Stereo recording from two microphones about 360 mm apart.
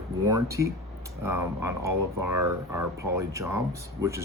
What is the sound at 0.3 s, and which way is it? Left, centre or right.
Speech, centre.